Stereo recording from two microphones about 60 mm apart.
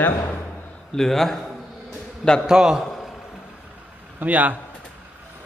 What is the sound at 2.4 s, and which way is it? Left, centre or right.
Speech, centre.